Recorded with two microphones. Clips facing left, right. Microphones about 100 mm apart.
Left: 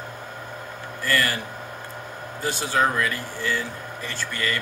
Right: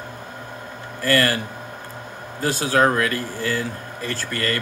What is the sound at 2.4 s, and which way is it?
A man's voice, 65° right (ahead or behind).